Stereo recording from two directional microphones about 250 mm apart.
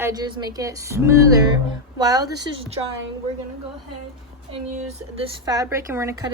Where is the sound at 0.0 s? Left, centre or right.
Centre.